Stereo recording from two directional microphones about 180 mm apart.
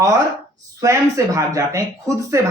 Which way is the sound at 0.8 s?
15° right (ahead or behind).